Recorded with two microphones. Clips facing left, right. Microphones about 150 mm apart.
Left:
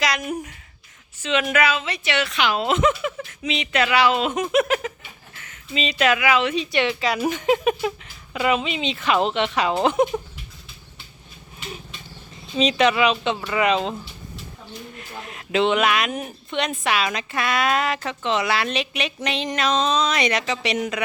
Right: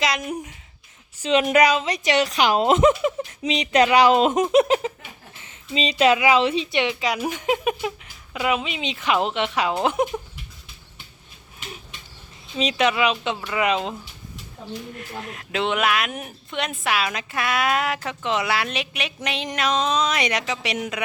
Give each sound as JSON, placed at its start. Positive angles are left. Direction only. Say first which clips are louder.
{"t": 0.0, "sound": "speech", "louder": "even", "side_deg": -25}
{"t": 1.2, "sound": "speech", "louder": "right 4 dB", "side_deg": -35}
{"t": 4.5, "sound": "a sound", "louder": "right 1 dB", "side_deg": -30}
{"t": 5.4, "sound": "speech", "louder": "right 1 dB", "side_deg": -30}
{"t": 12.5, "sound": "speech", "louder": "left 3 dB", "side_deg": -5}
{"t": 15.2, "sound": "speech", "louder": "left 5 dB", "side_deg": 0}